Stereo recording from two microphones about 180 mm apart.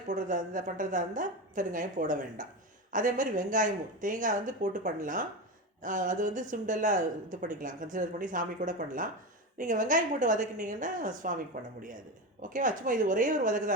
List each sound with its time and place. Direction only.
0.1 s speech: 45° right (ahead or behind)